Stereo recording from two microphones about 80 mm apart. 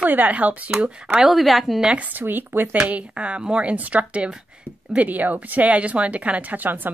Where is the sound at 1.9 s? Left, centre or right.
Centre.